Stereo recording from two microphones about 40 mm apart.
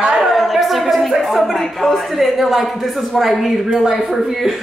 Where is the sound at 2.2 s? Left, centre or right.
Centre.